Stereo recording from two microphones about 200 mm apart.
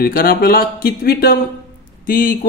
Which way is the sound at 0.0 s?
50° left (ahead or behind).